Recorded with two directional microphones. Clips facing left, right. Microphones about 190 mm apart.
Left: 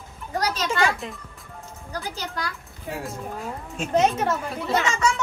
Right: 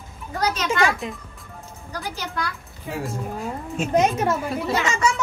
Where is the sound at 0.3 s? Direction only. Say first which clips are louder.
Right 1 dB; 35° left (ahead or behind).